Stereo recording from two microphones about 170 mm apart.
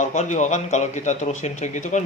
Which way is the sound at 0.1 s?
45° left (ahead or behind).